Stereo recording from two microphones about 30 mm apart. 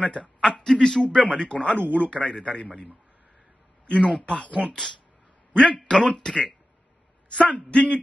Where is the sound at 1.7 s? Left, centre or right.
Left.